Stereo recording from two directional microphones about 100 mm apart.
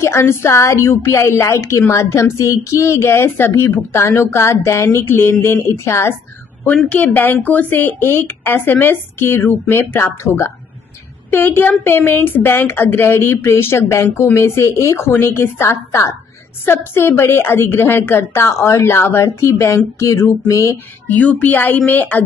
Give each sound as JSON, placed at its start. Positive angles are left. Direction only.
{"t": 0.0, "sound": "a woman's voice", "side_deg": 25}
{"t": 20.0, "sound": "a sound", "side_deg": 30}
{"t": 21.1, "sound": "speech", "side_deg": 15}